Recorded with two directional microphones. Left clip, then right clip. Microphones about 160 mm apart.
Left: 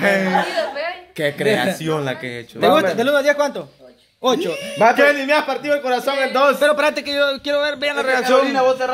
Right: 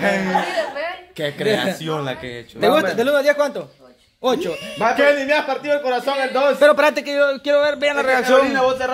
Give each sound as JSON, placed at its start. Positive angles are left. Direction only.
{"t": 0.0, "sound": "music", "side_deg": 50}
{"t": 0.5, "sound": "music", "side_deg": 0}
{"t": 1.1, "sound": "a woman's voice", "side_deg": 40}
{"t": 2.6, "sound": "speech", "side_deg": 0}
{"t": 4.7, "sound": "a man's voice", "side_deg": 50}
{"t": 6.6, "sound": "speech", "side_deg": -25}